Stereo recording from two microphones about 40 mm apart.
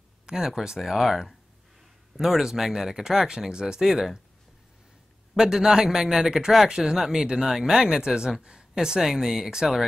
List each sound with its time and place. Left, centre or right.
0.3 s speech: centre
0.7 s speech: centre
5.4 s speech: centre